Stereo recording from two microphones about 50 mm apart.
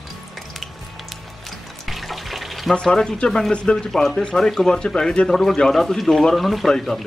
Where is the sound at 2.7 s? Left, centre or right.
Centre.